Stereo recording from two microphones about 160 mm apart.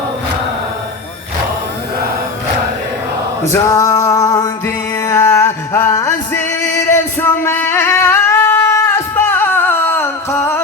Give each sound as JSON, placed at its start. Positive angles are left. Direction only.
{"t": 3.5, "sound": "music", "side_deg": 20}